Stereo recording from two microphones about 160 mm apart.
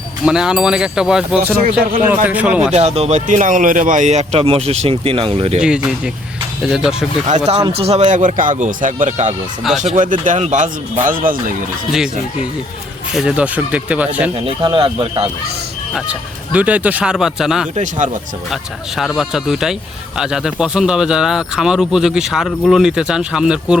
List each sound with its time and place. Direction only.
0.3 s speech: 5° right (ahead or behind)
2.7 s speech: 40° right (ahead or behind)
5.5 s speech: 5° right (ahead or behind)
7.3 s speech: 45° right (ahead or behind)
13.1 s speech: 5° right (ahead or behind)
14.6 s speech: 30° right (ahead or behind)
16.0 s speech: 10° right (ahead or behind)
17.7 s speech: 50° right (ahead or behind)
18.5 s speech: centre (ahead or behind)